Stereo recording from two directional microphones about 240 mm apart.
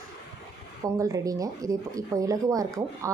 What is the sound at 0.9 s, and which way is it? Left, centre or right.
Speech, centre.